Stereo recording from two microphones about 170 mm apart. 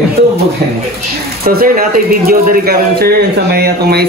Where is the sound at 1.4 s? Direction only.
65° right (ahead or behind).